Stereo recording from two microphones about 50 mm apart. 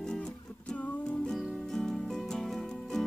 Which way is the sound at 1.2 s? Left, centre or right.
Centre.